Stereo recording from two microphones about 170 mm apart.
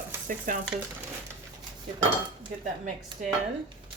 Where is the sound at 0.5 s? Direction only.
50° right (ahead or behind).